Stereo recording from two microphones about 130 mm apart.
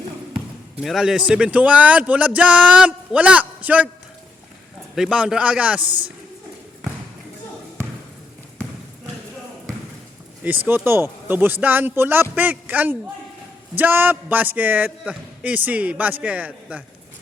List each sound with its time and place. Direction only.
0.3 s basketball bounce: centre (ahead or behind)
1.3 s a man's voice: 10° right (ahead or behind)
4.9 s a man's voice: 5° right (ahead or behind)
5.8 s a woman's voice: 40° right (ahead or behind)
10.7 s a man's voice: 15° right (ahead or behind)